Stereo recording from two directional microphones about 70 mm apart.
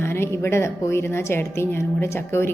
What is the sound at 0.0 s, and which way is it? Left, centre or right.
A woman's voice, left.